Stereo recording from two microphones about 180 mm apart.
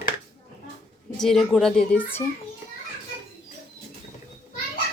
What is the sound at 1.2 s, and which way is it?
Speech, centre (ahead or behind).